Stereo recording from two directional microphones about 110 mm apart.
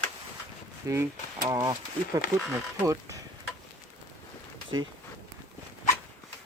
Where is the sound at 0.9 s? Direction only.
30° right (ahead or behind).